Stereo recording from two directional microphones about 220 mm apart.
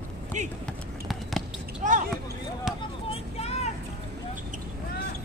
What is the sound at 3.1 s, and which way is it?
Vehicle, 25° left (ahead or behind).